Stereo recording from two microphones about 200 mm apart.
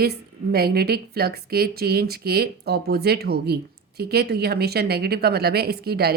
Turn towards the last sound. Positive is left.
turn(degrees=-50)  # may be behind; listen again after turning